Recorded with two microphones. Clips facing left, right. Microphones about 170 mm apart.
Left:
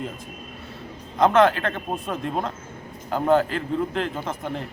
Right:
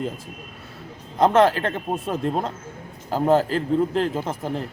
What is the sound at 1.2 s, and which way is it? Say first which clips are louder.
A man's voice: right 1 dB; 30° right (ahead or behind).